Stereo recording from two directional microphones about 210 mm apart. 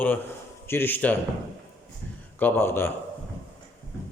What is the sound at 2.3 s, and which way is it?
Speech, 10° left (ahead or behind).